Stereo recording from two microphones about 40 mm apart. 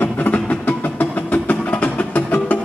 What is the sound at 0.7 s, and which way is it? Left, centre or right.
Music, left.